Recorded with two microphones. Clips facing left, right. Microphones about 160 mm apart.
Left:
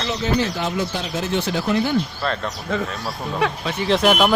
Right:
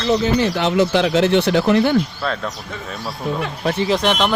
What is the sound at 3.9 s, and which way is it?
Speech, 5° left (ahead or behind).